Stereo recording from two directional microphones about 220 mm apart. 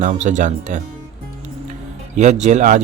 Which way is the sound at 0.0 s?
35° right (ahead or behind).